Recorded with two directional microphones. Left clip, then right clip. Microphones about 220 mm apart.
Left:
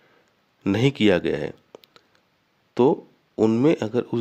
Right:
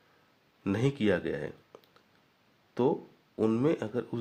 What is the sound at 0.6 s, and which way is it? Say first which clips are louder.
Speech: left 9 dB; 35° left (ahead or behind).